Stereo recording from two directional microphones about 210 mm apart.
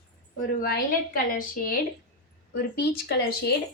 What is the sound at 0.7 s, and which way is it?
A woman's voice, 40° left (ahead or behind).